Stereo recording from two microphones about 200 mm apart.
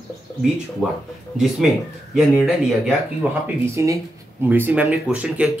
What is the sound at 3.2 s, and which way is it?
Speech, 10° right (ahead or behind).